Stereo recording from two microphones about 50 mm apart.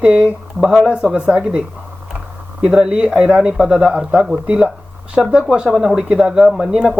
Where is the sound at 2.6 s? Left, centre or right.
Centre.